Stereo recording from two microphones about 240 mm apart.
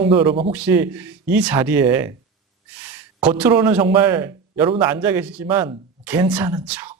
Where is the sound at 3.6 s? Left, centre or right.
Centre.